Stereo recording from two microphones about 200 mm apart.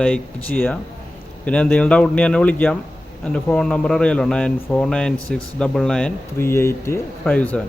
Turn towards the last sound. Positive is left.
turn(degrees=5)  # may be behind; listen again after turning